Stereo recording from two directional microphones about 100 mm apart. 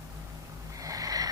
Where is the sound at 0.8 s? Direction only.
35° right (ahead or behind).